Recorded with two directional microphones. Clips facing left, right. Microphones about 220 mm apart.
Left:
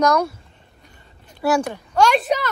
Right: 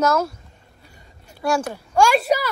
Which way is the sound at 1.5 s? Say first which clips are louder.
Even; 5° right (ahead or behind).